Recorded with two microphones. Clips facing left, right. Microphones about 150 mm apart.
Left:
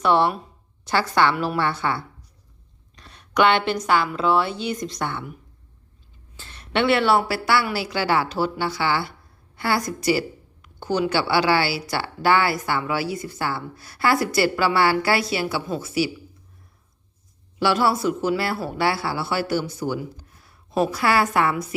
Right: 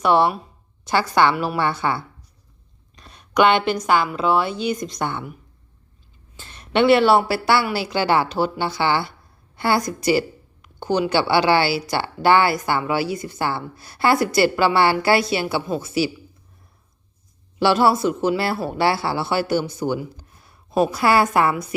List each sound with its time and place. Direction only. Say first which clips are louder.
0.0 s a woman's voice: right 2 dB; 15° right (ahead or behind)
2.9 s a sound: right 3 dB; 15° right (ahead or behind)
3.8 s a woman's voice: right 1 dB; 15° right (ahead or behind)
6.3 s a woman's voice: right 4 dB; 15° right (ahead or behind)
17.6 s a woman's voice: right 3 dB; 25° right (ahead or behind)